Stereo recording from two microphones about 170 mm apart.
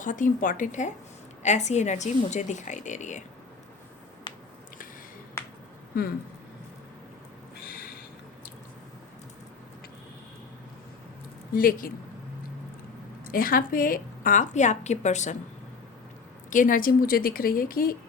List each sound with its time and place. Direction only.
0.0 s a woman's voice: 50° left (ahead or behind)
4.3 s a sound: 25° left (ahead or behind)
7.6 s a sound: 60° left (ahead or behind)
11.5 s a woman's voice: 55° left (ahead or behind)
13.2 s a woman's voice: 55° left (ahead or behind)
16.5 s a woman's voice: 50° left (ahead or behind)